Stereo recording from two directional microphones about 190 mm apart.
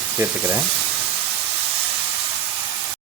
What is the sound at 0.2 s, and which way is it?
Speech, 5° right (ahead or behind).